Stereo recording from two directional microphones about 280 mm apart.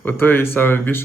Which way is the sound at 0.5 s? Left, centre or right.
Centre.